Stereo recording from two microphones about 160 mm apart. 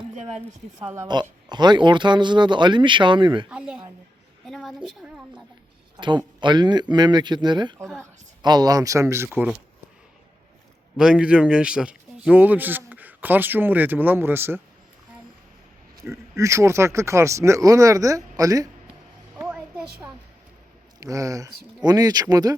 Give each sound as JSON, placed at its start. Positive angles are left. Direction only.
{"t": 1.0, "sound": "speech", "side_deg": -25}
{"t": 3.5, "sound": "a woman's voice", "side_deg": -5}
{"t": 6.4, "sound": "speech", "side_deg": -30}
{"t": 9.3, "sound": "a woman's voice", "side_deg": -5}
{"t": 10.9, "sound": "speech", "side_deg": -5}
{"t": 16.0, "sound": "speech", "side_deg": -20}
{"t": 19.4, "sound": "a sound", "side_deg": -10}
{"t": 21.0, "sound": "speech", "side_deg": -20}